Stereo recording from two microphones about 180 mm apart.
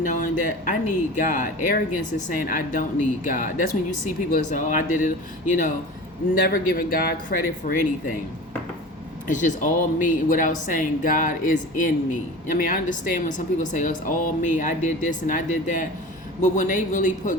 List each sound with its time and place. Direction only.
0.0 s speech: 45° left (ahead or behind)
9.2 s speech: 45° left (ahead or behind)